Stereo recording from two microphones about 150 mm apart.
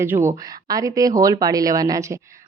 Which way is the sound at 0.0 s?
15° right (ahead or behind).